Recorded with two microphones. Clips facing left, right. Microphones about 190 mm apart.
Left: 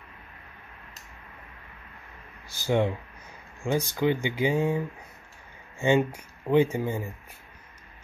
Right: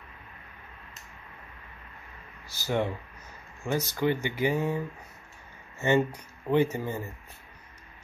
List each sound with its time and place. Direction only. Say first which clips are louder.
2.6 s speech: left 4 dB; 15° left (ahead or behind)